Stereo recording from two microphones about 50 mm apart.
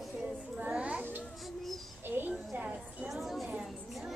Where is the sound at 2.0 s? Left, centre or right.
Right.